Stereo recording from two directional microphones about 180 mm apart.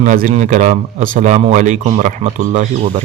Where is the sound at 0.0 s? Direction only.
50° right (ahead or behind).